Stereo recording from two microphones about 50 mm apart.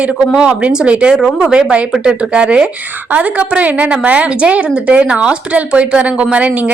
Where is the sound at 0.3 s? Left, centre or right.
Centre.